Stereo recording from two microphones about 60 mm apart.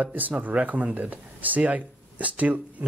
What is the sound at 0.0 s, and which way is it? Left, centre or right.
Speech, right.